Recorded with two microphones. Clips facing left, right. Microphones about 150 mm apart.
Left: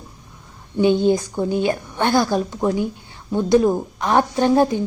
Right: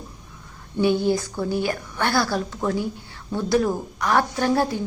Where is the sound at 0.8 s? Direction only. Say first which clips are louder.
Left 4 dB; 20° left (ahead or behind).